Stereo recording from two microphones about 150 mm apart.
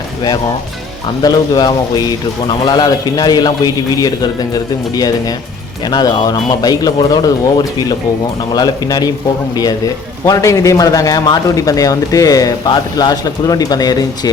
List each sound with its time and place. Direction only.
1.2 s a man's voice: 25° left (ahead or behind)